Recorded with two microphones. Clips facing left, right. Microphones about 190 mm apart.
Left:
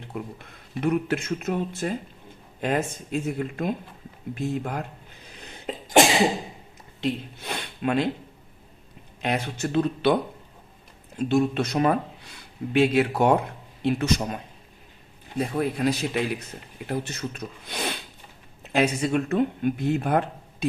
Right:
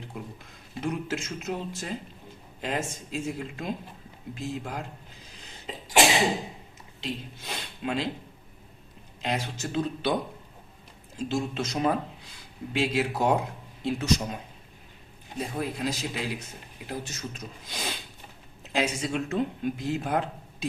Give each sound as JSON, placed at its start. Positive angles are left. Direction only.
{"t": 0.8, "sound": "speech", "side_deg": 60}
{"t": 4.4, "sound": "cough", "side_deg": 60}
{"t": 7.0, "sound": "speech", "side_deg": 60}
{"t": 9.2, "sound": "speech", "side_deg": 60}
{"t": 11.2, "sound": "speech", "side_deg": 60}
{"t": 15.4, "sound": "speech", "side_deg": 60}